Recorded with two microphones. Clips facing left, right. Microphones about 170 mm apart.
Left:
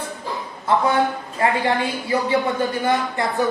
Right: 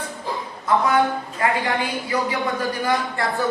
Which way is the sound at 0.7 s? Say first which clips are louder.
Even; 30° left (ahead or behind).